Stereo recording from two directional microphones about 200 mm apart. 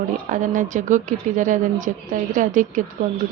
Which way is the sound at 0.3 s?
40° right (ahead or behind).